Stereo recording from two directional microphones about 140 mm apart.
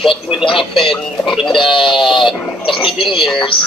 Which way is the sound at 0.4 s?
35° left (ahead or behind).